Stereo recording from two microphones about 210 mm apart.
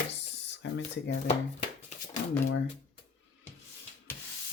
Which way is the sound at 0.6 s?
60° left (ahead or behind).